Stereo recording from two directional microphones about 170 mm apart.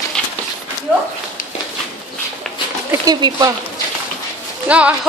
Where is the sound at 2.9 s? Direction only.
25° right (ahead or behind).